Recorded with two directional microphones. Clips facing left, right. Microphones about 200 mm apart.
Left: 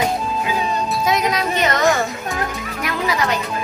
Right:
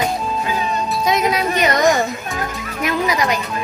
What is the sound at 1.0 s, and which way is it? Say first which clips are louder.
Music: right 3 dB; centre (ahead or behind).